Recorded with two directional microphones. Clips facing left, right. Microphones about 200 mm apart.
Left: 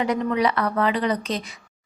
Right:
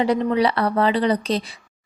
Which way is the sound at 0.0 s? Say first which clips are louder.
Right 3 dB; 30° right (ahead or behind).